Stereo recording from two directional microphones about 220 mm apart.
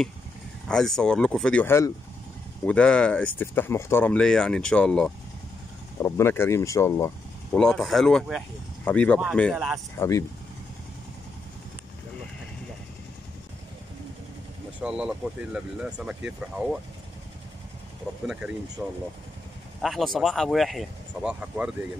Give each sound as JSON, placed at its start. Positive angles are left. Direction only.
{"t": 0.7, "sound": "speech", "side_deg": 5}
{"t": 9.9, "sound": "speech", "side_deg": 15}
{"t": 14.8, "sound": "speech", "side_deg": -5}
{"t": 18.2, "sound": "speech", "side_deg": -5}